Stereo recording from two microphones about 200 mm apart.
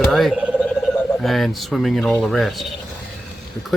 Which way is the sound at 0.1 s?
Centre (ahead or behind).